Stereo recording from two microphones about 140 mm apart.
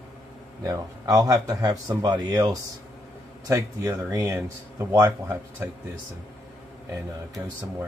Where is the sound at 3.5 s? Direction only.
20° right (ahead or behind).